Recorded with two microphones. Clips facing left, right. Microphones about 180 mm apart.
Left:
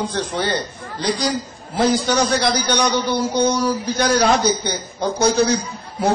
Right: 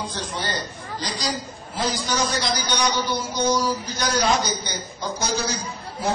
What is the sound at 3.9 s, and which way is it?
A man's voice, 60° left (ahead or behind).